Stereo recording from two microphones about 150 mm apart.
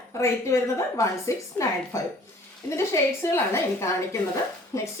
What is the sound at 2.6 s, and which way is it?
A woman's voice, 20° left (ahead or behind).